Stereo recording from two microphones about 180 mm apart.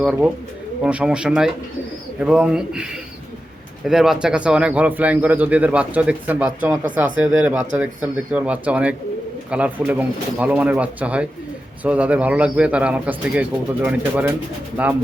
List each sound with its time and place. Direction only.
0.0 s speech: 5° right (ahead or behind)